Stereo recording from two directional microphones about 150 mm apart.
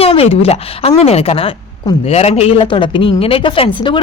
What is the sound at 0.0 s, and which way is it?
A woman's voice, 40° left (ahead or behind).